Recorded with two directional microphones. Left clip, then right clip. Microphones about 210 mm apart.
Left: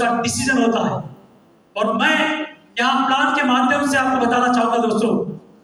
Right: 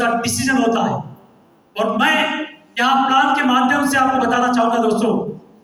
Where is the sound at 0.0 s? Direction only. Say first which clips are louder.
Right 1 dB; 50° right (ahead or behind).